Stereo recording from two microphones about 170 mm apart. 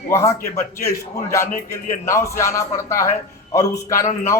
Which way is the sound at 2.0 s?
15° left (ahead or behind).